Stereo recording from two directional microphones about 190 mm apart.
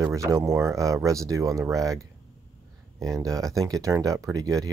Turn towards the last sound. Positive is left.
turn(degrees=-20)  # may be behind; listen again after turning